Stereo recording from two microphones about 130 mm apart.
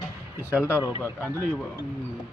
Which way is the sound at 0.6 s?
20° left (ahead or behind).